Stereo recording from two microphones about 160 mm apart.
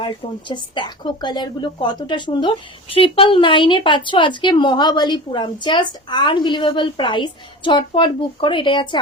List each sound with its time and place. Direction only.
0.0 s a woman's voice: 30° left (ahead or behind)